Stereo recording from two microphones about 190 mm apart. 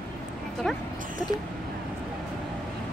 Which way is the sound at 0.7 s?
Centre (ahead or behind).